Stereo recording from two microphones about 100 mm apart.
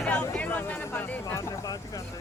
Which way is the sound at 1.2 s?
30° left (ahead or behind).